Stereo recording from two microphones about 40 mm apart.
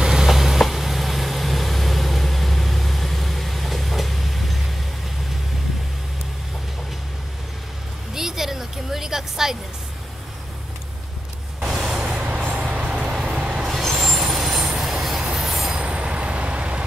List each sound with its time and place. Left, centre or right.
0.0 s vehicle: centre
8.1 s vehicle: centre
11.6 s vehicle: centre
12.2 s train: right
13.0 s vehicle: centre
13.8 s vehicle: centre
14.2 s train: centre
15.8 s vehicle: right